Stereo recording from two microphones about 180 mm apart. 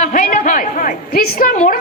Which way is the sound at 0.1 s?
50° left (ahead or behind).